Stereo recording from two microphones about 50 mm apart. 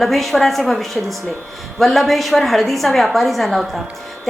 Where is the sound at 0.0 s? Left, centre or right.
Centre.